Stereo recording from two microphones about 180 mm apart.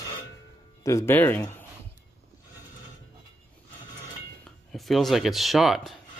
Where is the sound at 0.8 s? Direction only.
15° left (ahead or behind).